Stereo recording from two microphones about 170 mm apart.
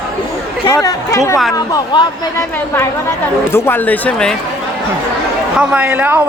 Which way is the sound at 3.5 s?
15° left (ahead or behind).